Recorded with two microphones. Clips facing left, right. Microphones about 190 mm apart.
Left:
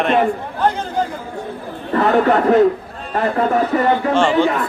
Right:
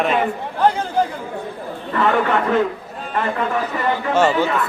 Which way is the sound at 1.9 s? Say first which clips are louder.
Left 4 dB; 40° left (ahead or behind).